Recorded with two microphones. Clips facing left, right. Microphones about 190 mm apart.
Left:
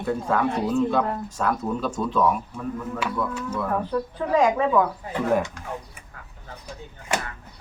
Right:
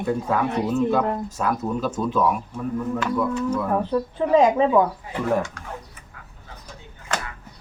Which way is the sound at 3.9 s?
25° right (ahead or behind).